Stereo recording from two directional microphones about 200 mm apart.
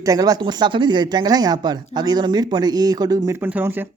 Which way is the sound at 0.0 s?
20° right (ahead or behind).